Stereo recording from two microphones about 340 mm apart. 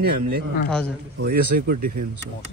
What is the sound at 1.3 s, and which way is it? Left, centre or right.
Speech, right.